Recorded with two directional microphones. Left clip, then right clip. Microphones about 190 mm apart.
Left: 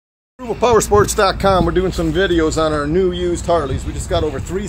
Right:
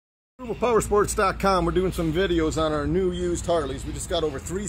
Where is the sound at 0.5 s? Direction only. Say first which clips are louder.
Left 9 dB; 45° right (ahead or behind).